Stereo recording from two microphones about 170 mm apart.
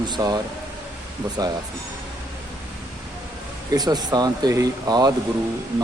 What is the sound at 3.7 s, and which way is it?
Speech, 25° right (ahead or behind).